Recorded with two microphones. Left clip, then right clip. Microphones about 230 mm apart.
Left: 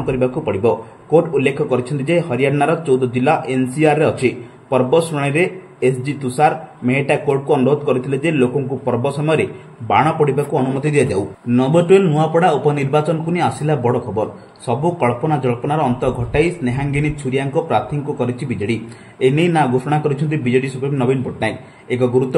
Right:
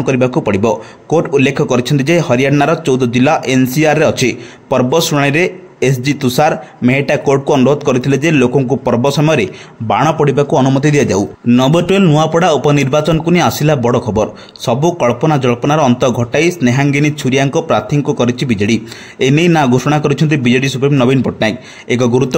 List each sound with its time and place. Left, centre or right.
0.0 s speech: right